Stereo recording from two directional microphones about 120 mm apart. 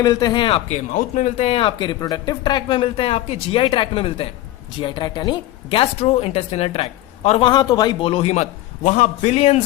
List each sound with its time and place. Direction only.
0.0 s a man's voice: 35° left (ahead or behind)
0.7 s speech: 90° left
1.5 s speech: 45° left (ahead or behind)
4.8 s speech: 40° left (ahead or behind); by 7.4 s 60° left (ahead or behind)
7.4 s a man's voice: 40° left (ahead or behind); by 9.6 s 65° left (ahead or behind)